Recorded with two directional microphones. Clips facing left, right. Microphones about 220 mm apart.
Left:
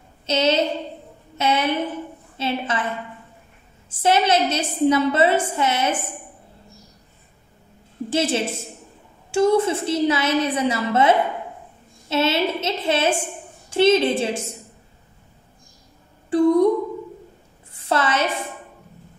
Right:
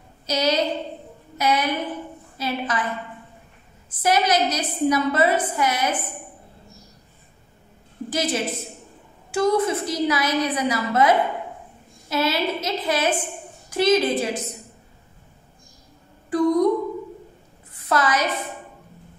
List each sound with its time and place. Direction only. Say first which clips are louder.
0.3 s a woman's voice: left 2 dB; 25° left (ahead or behind)
4.0 s a woman's voice: left 2 dB; 25° left (ahead or behind)
8.1 s a woman's voice: left 3 dB; 30° left (ahead or behind)
16.3 s speech: left 3 dB; 30° left (ahead or behind)
17.7 s a sound: even; 30° left (ahead or behind)